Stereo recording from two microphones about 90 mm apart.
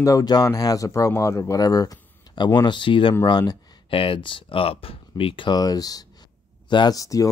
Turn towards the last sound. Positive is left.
turn(degrees=40)  # may be behind; listen again after turning